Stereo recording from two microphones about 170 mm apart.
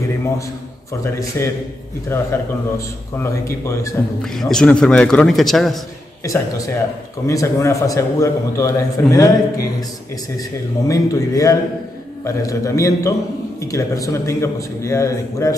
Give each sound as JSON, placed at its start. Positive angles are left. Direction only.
{"t": 1.4, "sound": "a man's voice", "side_deg": 15}
{"t": 4.2, "sound": "speech", "side_deg": 5}
{"t": 6.2, "sound": "a man's voice", "side_deg": 20}
{"t": 10.9, "sound": "a man's voice", "side_deg": 20}